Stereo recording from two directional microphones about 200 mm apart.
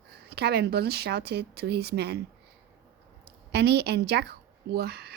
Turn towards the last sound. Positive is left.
turn(degrees=-50)  # may be behind; listen again after turning